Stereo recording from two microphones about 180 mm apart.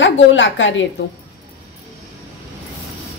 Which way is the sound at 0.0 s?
90° left.